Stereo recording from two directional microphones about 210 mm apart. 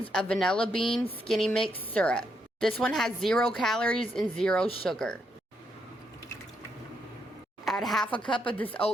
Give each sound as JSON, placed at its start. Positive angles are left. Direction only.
{"t": 0.1, "sound": "a woman's voice", "side_deg": 5}
{"t": 7.6, "sound": "a woman's voice", "side_deg": 0}
{"t": 8.2, "sound": "speech", "side_deg": 25}
{"t": 8.5, "sound": "speech", "side_deg": 5}